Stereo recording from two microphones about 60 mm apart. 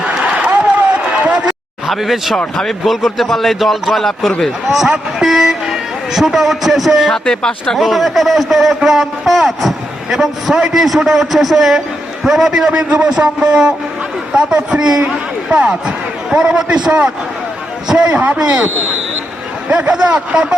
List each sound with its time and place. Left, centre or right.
0.9 s run: centre
1.5 s a sound: centre
2.6 s a man's voice: centre
7.3 s speech: centre
7.8 s a man's voice: centre
18.1 s speech: right
18.3 s a man's voice: centre